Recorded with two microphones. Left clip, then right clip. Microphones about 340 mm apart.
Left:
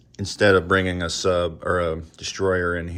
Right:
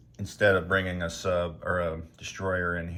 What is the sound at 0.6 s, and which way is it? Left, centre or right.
Speech, centre.